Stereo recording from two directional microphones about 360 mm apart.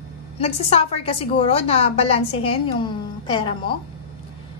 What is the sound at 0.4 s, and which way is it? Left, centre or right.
A woman's voice, centre.